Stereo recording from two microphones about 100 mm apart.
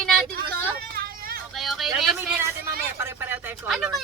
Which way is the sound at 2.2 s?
25° right (ahead or behind).